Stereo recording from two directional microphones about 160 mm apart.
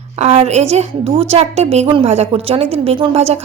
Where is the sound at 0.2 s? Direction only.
40° right (ahead or behind).